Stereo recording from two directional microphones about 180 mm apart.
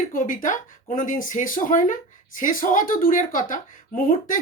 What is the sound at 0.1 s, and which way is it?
Speech, 50° left (ahead or behind).